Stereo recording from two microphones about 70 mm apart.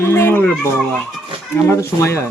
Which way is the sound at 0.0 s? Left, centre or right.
Left.